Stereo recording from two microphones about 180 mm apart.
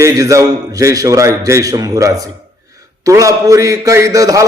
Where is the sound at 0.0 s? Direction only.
20° right (ahead or behind).